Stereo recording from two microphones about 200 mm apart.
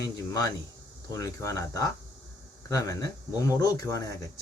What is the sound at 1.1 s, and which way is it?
Speech, 15° left (ahead or behind).